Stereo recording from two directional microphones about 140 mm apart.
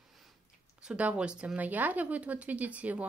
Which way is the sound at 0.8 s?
10° right (ahead or behind).